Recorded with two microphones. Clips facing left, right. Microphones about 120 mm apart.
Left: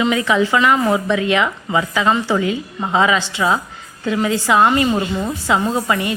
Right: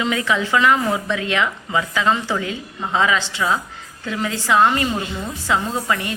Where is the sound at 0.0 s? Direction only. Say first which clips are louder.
Left 5 dB; 20° left (ahead or behind).